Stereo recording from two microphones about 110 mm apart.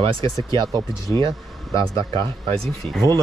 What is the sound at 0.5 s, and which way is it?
Speech, 45° right (ahead or behind).